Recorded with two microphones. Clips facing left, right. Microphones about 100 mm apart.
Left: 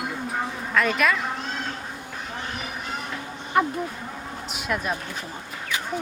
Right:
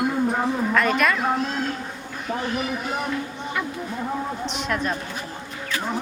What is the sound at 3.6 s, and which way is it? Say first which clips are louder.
Speech: left 8 dB; 45° left (ahead or behind).